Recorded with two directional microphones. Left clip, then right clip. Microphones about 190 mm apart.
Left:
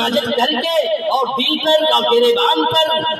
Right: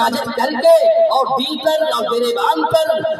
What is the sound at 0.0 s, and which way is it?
A man's voice, 25° left (ahead or behind).